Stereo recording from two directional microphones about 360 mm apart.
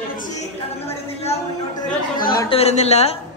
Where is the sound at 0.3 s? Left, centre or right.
Centre.